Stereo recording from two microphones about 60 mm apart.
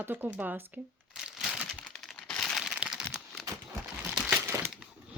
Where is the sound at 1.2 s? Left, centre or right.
Centre.